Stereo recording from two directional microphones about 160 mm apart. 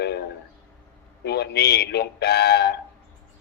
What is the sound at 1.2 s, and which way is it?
Speech, 90° left.